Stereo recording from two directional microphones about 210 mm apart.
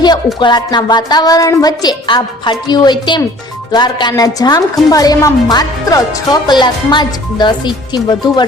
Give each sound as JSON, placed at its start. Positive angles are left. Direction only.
{"t": 0.3, "sound": "speech", "side_deg": 20}